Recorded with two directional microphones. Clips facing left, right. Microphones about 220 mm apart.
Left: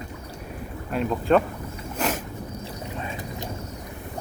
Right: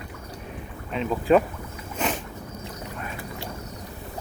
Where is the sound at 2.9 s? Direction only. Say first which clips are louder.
Left 3 dB; 25° left (ahead or behind).